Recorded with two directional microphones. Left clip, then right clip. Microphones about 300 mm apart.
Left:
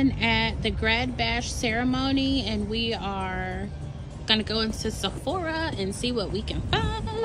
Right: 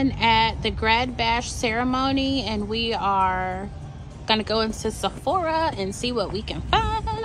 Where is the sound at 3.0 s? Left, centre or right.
Centre.